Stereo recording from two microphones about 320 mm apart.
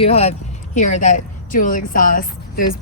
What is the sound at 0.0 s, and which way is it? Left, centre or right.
A woman's voice, centre.